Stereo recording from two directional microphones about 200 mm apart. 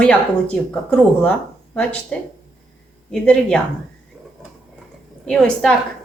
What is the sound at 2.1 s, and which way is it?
Speech, 5° left (ahead or behind).